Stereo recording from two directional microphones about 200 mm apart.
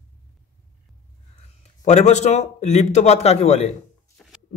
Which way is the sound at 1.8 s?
35° left (ahead or behind).